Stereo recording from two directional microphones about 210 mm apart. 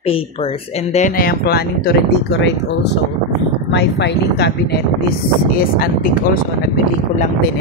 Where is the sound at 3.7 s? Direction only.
55° left (ahead or behind).